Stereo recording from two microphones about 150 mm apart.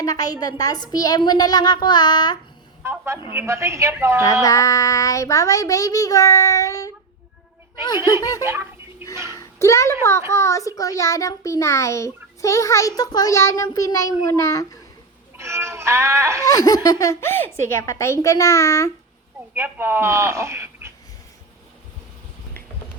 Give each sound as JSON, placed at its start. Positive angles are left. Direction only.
{"t": 0.0, "sound": "a child's voice", "side_deg": 25}
{"t": 2.8, "sound": "a man's voice", "side_deg": -15}
{"t": 4.4, "sound": "a child's voice", "side_deg": 20}
{"t": 8.4, "sound": "a sound", "side_deg": -15}
{"t": 9.3, "sound": "a child's voice", "side_deg": 20}
{"t": 15.4, "sound": "speech", "side_deg": -15}
{"t": 16.5, "sound": "a child's voice", "side_deg": 25}
{"t": 19.5, "sound": "speech", "side_deg": -15}